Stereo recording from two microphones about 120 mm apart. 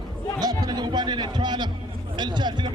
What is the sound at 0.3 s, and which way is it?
A man's voice, 35° right (ahead or behind).